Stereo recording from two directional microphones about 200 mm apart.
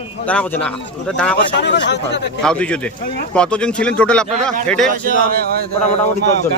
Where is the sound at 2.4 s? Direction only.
5° left (ahead or behind).